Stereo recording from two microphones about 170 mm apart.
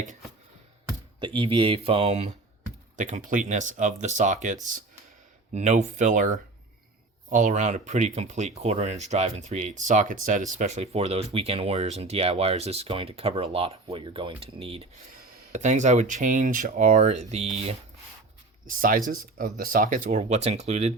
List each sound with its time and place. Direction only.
1.2 s speech: 30° right (ahead or behind)
2.9 s speech: 50° right (ahead or behind)
5.5 s speech: 45° right (ahead or behind)
15.1 s speech: 50° right (ahead or behind)
18.6 s speech: 55° right (ahead or behind)